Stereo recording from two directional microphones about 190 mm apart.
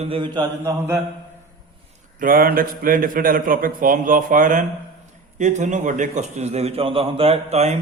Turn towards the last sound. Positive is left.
turn(degrees=-35)  # may be behind; listen again after turning